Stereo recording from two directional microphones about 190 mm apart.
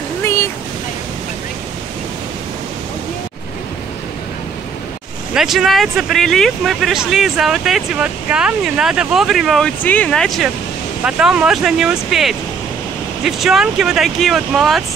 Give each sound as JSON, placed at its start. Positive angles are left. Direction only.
{"t": 0.2, "sound": "waves", "side_deg": 15}
{"t": 5.3, "sound": "speech", "side_deg": 0}